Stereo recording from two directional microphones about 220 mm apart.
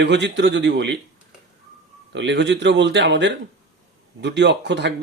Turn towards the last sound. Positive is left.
turn(degrees=-50)  # may be behind; listen again after turning